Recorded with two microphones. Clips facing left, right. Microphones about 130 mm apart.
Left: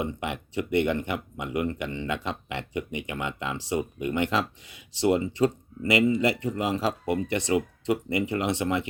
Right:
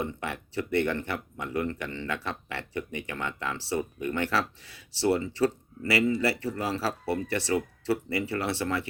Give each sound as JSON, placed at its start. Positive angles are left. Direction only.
{"t": 0.0, "sound": "speech", "side_deg": 15}